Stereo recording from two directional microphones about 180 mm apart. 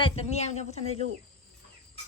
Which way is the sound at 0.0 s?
35° left (ahead or behind).